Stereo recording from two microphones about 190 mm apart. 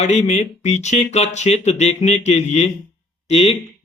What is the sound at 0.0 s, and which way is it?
Speech, 35° left (ahead or behind).